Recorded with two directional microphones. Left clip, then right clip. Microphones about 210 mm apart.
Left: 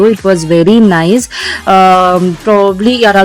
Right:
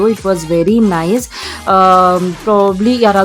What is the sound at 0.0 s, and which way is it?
Speech, 15° left (ahead or behind).